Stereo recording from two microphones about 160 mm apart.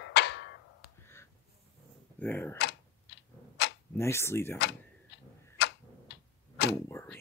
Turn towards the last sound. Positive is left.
turn(degrees=15)  # may be behind; listen again after turning